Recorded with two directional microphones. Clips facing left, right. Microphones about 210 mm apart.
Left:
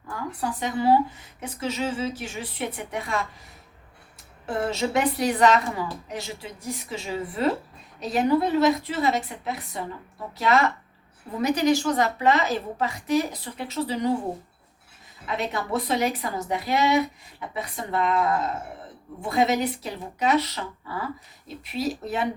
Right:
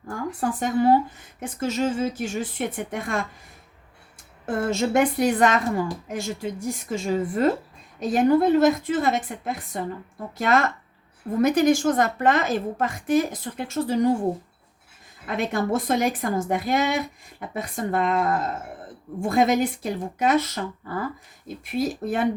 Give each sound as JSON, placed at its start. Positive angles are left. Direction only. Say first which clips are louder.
{"t": 0.1, "sound": "speech", "louder": "right 4 dB", "side_deg": -50}
{"t": 4.4, "sound": "speech", "louder": "right 3 dB", "side_deg": -50}
{"t": 15.3, "sound": "speech", "louder": "right 4 dB", "side_deg": -50}